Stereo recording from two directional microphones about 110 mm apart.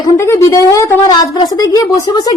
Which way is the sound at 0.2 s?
25° left (ahead or behind).